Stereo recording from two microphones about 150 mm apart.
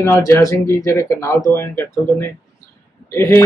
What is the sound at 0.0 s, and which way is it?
Speech, 20° left (ahead or behind).